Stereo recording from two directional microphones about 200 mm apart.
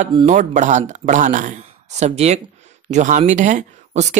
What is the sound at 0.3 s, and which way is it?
Speech, 40° right (ahead or behind).